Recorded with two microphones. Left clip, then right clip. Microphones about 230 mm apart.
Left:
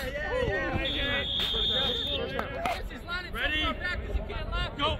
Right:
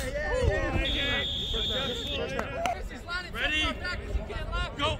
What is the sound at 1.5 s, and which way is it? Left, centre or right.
Fire alarm, centre.